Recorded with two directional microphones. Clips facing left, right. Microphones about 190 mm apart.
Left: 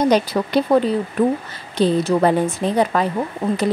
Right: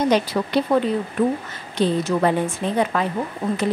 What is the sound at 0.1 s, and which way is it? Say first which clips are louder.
Speech: left 2 dB; 40° left (ahead or behind).